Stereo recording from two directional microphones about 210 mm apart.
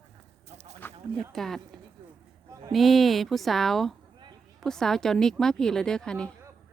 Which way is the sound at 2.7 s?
Centre (ahead or behind).